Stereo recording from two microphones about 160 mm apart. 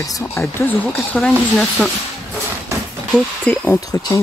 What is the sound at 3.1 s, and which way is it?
Speech, 5° left (ahead or behind).